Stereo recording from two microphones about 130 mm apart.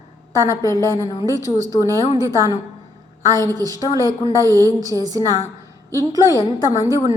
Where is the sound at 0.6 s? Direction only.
25° left (ahead or behind).